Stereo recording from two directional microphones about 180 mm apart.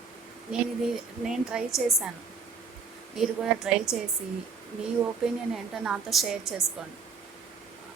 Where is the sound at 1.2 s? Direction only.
Centre (ahead or behind).